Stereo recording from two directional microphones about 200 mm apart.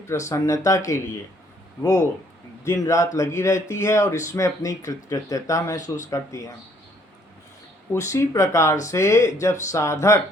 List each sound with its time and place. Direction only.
0.1 s speech: 15° left (ahead or behind)
1.8 s speech: 15° left (ahead or behind)
7.9 s speech: 15° left (ahead or behind)